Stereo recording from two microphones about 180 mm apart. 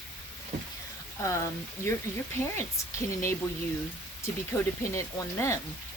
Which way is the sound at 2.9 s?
15° left (ahead or behind).